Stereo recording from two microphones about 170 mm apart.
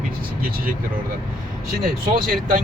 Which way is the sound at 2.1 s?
55° right (ahead or behind).